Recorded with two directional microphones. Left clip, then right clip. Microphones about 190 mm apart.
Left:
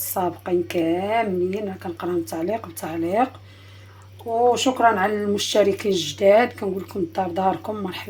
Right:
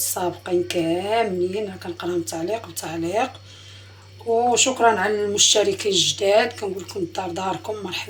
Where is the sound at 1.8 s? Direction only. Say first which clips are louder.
Even; 50° left (ahead or behind).